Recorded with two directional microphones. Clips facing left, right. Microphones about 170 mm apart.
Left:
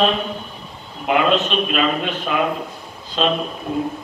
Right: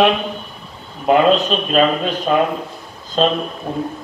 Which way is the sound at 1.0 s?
35° right (ahead or behind).